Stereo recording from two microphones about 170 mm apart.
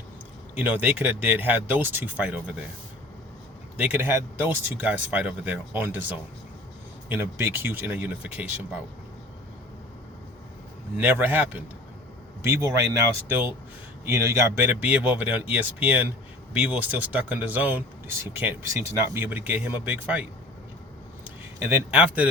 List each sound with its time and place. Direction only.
0.5 s speech: 10° right (ahead or behind)
3.8 s speech: 10° right (ahead or behind)
10.9 s speech: 10° right (ahead or behind)
21.2 s a man's voice: 15° right (ahead or behind)